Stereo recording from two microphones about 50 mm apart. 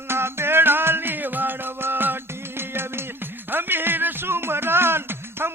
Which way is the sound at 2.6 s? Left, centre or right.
Right.